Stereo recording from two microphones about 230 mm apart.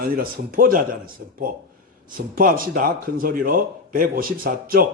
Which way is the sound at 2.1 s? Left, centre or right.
Right.